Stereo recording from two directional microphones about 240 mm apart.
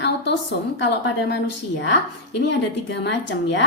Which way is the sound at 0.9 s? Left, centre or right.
Left.